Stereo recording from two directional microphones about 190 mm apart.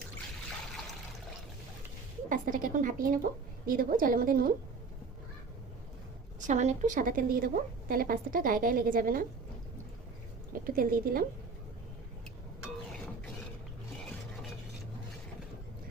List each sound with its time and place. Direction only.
2.3 s a woman's voice: 45° right (ahead or behind)
6.5 s a woman's voice: 40° right (ahead or behind)
10.8 s a woman's voice: 50° right (ahead or behind)